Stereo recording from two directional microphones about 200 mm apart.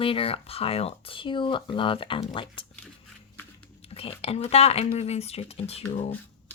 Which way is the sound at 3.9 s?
30° left (ahead or behind).